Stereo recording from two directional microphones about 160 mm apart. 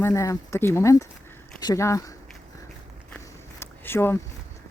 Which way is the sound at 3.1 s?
15° left (ahead or behind).